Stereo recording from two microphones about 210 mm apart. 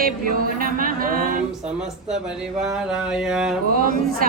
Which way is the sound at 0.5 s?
40° right (ahead or behind).